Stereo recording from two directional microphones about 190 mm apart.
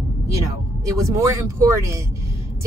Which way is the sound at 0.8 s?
15° right (ahead or behind).